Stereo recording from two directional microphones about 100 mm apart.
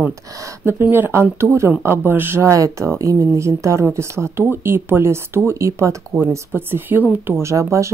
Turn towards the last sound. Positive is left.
turn(degrees=-30)  # may be behind; listen again after turning